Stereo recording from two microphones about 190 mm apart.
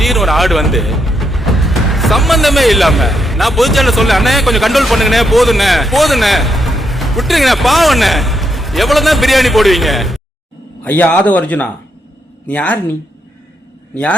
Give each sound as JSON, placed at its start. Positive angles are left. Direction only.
{"t": 0.0, "sound": "a man's voice", "side_deg": 0}